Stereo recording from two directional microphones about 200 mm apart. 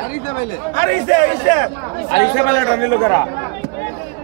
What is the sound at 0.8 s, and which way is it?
Speech, 40° right (ahead or behind).